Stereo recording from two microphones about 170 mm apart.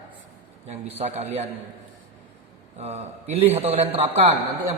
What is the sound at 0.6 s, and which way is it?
Speech, 40° right (ahead or behind).